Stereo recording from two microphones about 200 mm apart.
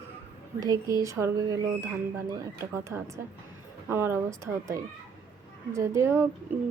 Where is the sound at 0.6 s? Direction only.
15° right (ahead or behind).